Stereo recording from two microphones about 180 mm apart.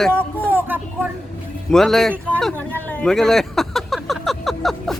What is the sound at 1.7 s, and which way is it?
Speech, centre (ahead or behind).